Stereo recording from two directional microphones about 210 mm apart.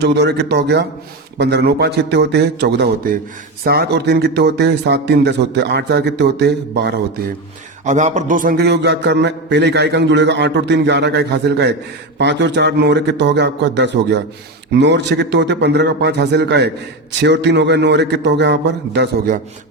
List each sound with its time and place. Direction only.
0.0 s a man's voice: 55° right (ahead or behind)
7.9 s a man's voice: 35° right (ahead or behind); by 19.4 s 55° right (ahead or behind)